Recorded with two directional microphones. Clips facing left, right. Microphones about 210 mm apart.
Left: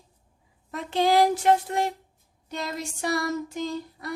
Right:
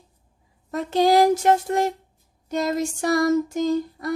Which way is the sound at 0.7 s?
40° right (ahead or behind).